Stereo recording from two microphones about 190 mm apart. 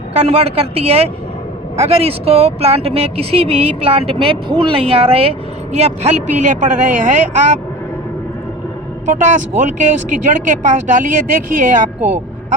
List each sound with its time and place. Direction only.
0.1 s speech: 35° right (ahead or behind)
9.0 s speech: 40° right (ahead or behind)